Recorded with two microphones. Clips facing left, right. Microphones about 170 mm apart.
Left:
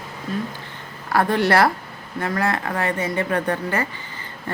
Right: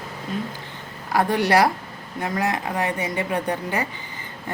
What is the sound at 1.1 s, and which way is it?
Speech, 15° right (ahead or behind).